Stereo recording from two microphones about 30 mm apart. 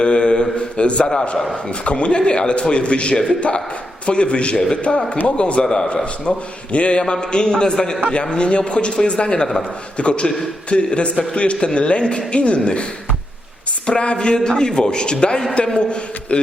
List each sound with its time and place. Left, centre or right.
0.0 s mantra: left
0.8 s a man's voice: left
5.6 s a man's voice: left
6.2 s a man's voice: left
13.8 s a man's voice: left